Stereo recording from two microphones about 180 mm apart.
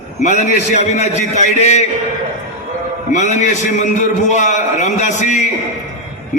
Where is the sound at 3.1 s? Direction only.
40° left (ahead or behind).